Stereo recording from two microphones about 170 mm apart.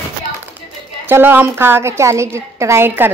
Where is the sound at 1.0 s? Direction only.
10° right (ahead or behind).